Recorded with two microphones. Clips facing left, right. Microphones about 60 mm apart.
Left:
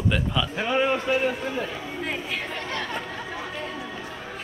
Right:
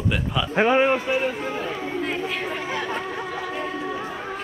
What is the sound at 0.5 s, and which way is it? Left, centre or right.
Speech, right.